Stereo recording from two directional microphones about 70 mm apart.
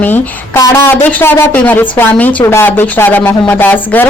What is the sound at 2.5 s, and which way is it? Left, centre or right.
Speech, left.